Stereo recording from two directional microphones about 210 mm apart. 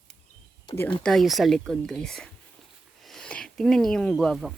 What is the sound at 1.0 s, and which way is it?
Speech, centre (ahead or behind).